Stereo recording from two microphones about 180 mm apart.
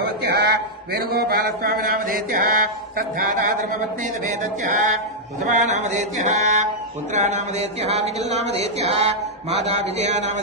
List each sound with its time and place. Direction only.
0.0 s speech: 60° right (ahead or behind)
4.6 s mantra: 45° right (ahead or behind)
5.4 s speech: 40° right (ahead or behind)
7.9 s speech: 35° right (ahead or behind)